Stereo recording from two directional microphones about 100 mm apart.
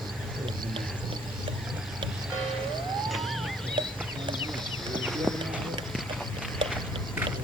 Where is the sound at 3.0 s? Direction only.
Centre (ahead or behind).